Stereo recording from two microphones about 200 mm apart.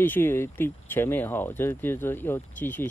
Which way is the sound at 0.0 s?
10° left (ahead or behind).